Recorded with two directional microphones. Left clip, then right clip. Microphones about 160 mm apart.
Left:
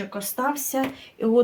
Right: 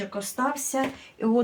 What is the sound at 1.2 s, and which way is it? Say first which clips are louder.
Speech: left 3 dB; 30° left (ahead or behind).